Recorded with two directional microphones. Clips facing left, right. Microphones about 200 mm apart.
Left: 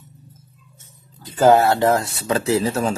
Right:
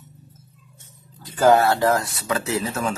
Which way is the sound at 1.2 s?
25° left (ahead or behind).